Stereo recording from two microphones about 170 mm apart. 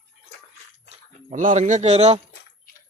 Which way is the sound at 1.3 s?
50° right (ahead or behind).